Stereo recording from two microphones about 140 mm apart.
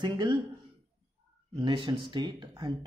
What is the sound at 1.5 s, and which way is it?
Speech, 35° right (ahead or behind).